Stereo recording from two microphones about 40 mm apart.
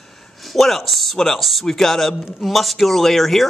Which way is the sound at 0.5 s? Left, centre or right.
Centre.